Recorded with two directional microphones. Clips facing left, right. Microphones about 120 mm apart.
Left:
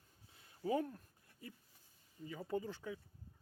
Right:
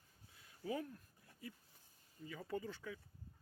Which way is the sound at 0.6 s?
35° left (ahead or behind).